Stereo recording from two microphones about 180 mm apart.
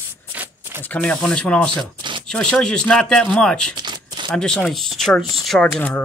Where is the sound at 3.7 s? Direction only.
25° right (ahead or behind).